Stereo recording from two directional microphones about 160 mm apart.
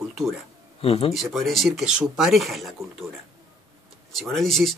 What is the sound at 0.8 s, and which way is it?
Speech, 35° left (ahead or behind).